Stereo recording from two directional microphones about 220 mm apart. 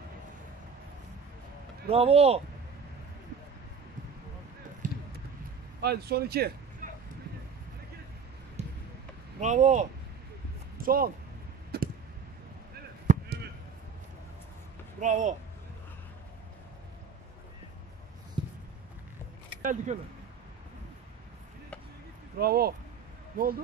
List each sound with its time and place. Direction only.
1.9 s speech: 25° right (ahead or behind)
4.8 s a sound: 35° right (ahead or behind)
5.8 s speech: 45° right (ahead or behind)
8.6 s basketball bounce: 30° right (ahead or behind)
9.4 s speech: 30° right (ahead or behind)
11.7 s clicking: 45° right (ahead or behind)
13.0 s chop: 35° right (ahead or behind)
15.0 s speech: 35° right (ahead or behind)
19.6 s speech: 35° right (ahead or behind)
22.4 s speech: 45° right (ahead or behind)